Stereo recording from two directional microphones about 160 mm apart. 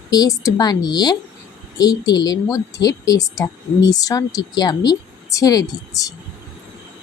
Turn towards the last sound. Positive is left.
turn(degrees=20)  # may be behind; listen again after turning